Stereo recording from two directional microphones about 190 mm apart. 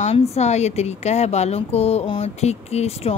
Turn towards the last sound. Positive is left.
turn(degrees=35)  # may be behind; listen again after turning